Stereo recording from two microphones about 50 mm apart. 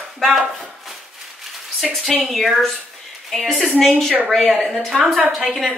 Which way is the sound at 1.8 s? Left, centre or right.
Centre.